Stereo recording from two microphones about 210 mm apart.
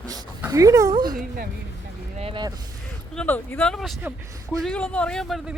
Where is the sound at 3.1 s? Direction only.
10° left (ahead or behind).